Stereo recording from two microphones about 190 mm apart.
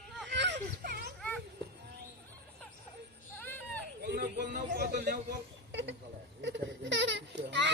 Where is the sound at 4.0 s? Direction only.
60° right (ahead or behind).